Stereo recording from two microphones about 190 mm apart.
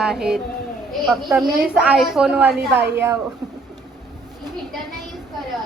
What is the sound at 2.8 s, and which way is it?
Speech, 65° right (ahead or behind).